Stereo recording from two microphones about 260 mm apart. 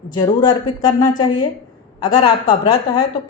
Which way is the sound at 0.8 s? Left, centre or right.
Centre.